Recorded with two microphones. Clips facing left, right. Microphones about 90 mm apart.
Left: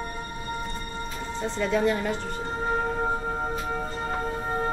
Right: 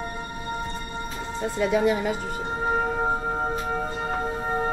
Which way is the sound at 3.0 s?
20° right (ahead or behind).